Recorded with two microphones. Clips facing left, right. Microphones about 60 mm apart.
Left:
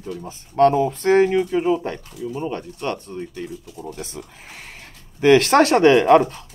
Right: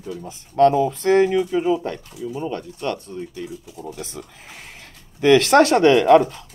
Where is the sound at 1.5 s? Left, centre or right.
Left.